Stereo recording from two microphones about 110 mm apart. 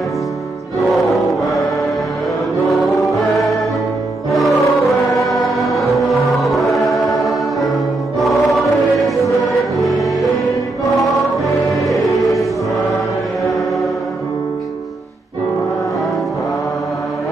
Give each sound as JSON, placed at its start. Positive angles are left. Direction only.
{"t": 0.9, "sound": "music", "side_deg": 0}
{"t": 3.1, "sound": "music", "side_deg": 0}
{"t": 9.8, "sound": "music", "side_deg": 0}